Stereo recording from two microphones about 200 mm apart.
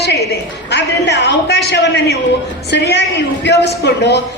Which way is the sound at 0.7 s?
60° left (ahead or behind).